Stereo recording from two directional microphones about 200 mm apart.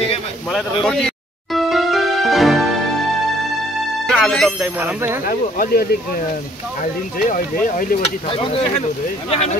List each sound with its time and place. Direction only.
0.8 s music: 5° left (ahead or behind)
4.1 s speech: 5° left (ahead or behind)
5.2 s speech: 45° left (ahead or behind)
8.3 s speech: 25° left (ahead or behind)